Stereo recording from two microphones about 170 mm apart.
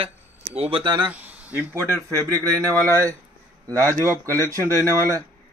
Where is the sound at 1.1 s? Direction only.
10° right (ahead or behind).